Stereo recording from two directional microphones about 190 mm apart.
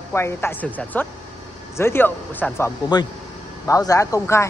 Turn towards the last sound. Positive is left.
turn(degrees=15)  # may be behind; listen again after turning